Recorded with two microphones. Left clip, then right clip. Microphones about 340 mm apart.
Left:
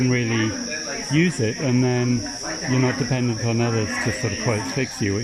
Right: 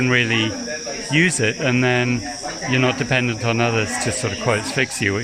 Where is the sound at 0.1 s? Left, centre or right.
Right.